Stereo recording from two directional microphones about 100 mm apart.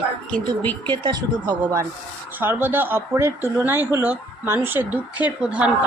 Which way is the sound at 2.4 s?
20° right (ahead or behind).